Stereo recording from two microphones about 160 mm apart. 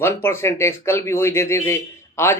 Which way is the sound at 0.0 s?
15° left (ahead or behind).